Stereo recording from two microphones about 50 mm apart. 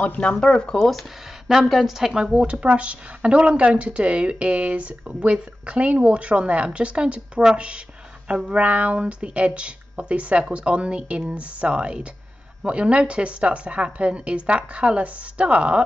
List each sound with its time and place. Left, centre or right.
0.3 s a woman's voice: centre; by 15.8 s right